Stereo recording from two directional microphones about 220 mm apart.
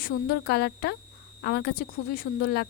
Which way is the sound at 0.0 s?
45° left (ahead or behind).